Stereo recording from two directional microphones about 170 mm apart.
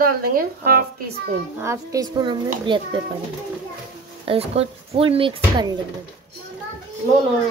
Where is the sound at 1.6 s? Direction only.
20° right (ahead or behind).